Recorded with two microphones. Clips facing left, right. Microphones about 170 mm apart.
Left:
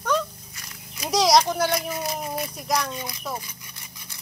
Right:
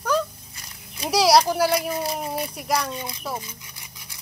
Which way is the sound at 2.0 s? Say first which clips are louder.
Right 2 dB; 30° right (ahead or behind).